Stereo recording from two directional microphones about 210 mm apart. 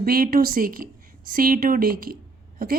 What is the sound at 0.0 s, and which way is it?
A woman's voice, 45° right (ahead or behind).